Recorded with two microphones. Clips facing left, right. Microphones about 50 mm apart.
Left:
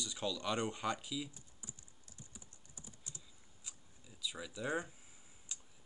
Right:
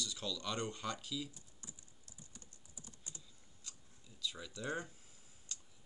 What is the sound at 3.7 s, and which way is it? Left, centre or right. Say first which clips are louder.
Scissors: left 1 dB; centre.